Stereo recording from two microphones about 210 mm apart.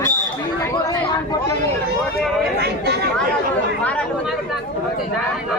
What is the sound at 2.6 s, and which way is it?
Chatter, 50° right (ahead or behind).